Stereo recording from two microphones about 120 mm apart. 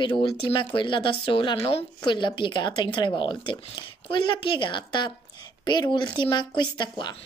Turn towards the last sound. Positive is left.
turn(degrees=40)  # may be behind; listen again after turning